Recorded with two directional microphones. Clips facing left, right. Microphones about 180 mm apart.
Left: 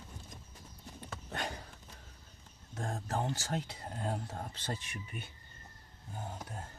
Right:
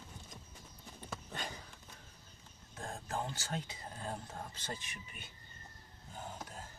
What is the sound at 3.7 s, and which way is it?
Speech, 65° left (ahead or behind).